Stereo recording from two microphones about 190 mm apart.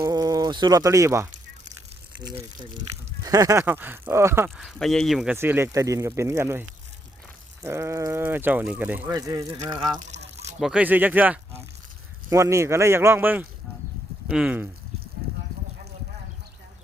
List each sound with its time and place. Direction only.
0.0 s speech: 20° right (ahead or behind)
3.2 s speech: 15° right (ahead or behind)
10.6 s speech: 5° right (ahead or behind)